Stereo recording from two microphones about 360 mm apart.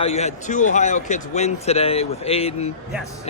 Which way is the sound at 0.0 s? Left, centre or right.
Centre.